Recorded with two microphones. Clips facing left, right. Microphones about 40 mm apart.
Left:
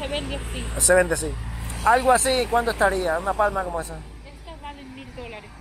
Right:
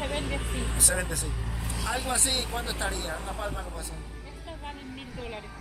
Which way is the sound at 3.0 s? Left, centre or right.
Centre.